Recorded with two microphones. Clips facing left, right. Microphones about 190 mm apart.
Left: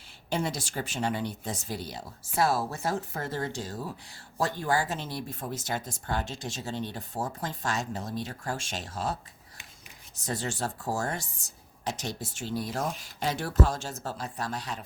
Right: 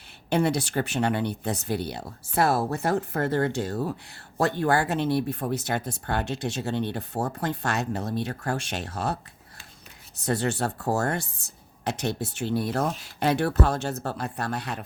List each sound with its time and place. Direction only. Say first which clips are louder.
0.3 s speech: right 7 dB; 65° right (ahead or behind)
10.2 s speech: right 7 dB; 65° right (ahead or behind)